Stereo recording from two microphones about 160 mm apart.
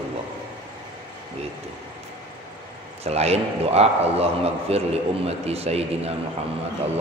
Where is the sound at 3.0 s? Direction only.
40° right (ahead or behind).